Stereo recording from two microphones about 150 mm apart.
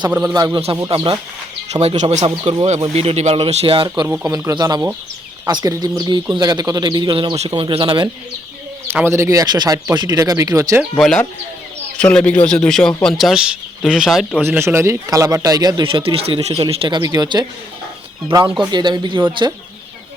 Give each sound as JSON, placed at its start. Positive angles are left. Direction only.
{"t": 0.1, "sound": "a man's voice", "side_deg": -15}
{"t": 0.3, "sound": "a man's voice", "side_deg": -25}
{"t": 1.7, "sound": "speech", "side_deg": -45}
{"t": 2.2, "sound": "a man's voice", "side_deg": -35}
{"t": 3.8, "sound": "a man's voice", "side_deg": -25}
{"t": 8.9, "sound": "speech", "side_deg": -15}
{"t": 10.9, "sound": "speech", "side_deg": 5}
{"t": 14.4, "sound": "a man's voice", "side_deg": -15}
{"t": 17.0, "sound": "speech", "side_deg": -25}
{"t": 18.4, "sound": "speech", "side_deg": -5}
{"t": 18.7, "sound": "a man's voice", "side_deg": -30}